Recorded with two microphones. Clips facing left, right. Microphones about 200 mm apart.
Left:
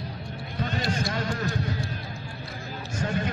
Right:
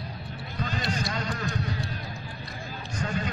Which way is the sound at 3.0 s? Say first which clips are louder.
Left 2 dB; 45° left (ahead or behind).